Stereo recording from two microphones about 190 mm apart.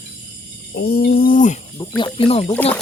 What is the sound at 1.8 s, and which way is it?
Speech, 25° left (ahead or behind).